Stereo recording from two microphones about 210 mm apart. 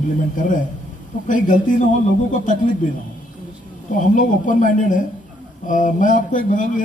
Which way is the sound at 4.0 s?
40° left (ahead or behind).